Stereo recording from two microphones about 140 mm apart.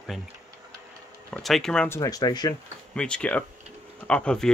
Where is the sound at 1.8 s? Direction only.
20° left (ahead or behind).